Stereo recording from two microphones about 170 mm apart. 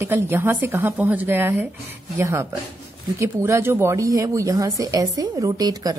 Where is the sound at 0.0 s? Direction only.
10° right (ahead or behind).